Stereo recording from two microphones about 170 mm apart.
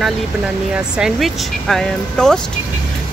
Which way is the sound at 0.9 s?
Centre (ahead or behind).